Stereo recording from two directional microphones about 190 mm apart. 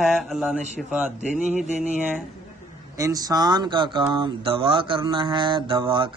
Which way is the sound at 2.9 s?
20° right (ahead or behind).